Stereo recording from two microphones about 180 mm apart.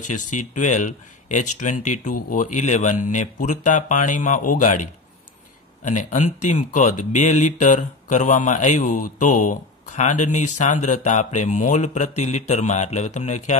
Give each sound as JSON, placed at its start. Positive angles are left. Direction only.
{"t": 0.0, "sound": "speech", "side_deg": 45}
{"t": 5.9, "sound": "speech", "side_deg": 40}